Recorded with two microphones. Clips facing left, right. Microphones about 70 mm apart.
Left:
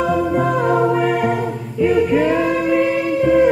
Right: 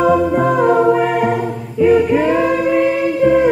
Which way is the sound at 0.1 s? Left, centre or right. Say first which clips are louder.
Right 3 dB; centre.